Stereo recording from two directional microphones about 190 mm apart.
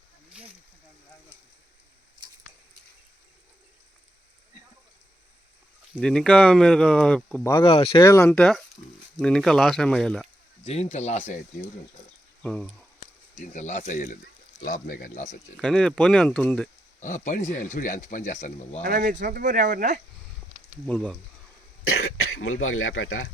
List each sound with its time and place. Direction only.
5.9 s speech: 5° left (ahead or behind)
7.6 s speech: 30° left (ahead or behind)
8.0 s speech: 15° left (ahead or behind)
10.6 s speech: 35° left (ahead or behind)
12.4 s speech: 5° left (ahead or behind)
13.4 s speech: 40° left (ahead or behind)
15.5 s speech: 5° left (ahead or behind)
17.0 s speech: 40° left (ahead or behind)
18.8 s speech: 50° right (ahead or behind)
20.8 s speech: 5° left (ahead or behind)
21.8 s speech: 90° left